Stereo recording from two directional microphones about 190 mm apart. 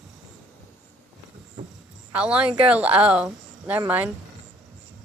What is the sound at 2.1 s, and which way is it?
Speech, 5° right (ahead or behind).